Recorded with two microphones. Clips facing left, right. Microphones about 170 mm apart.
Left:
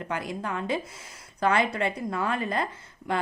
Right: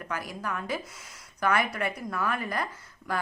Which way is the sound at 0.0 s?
25° left (ahead or behind).